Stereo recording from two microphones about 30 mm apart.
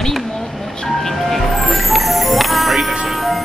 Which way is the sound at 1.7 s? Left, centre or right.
Centre.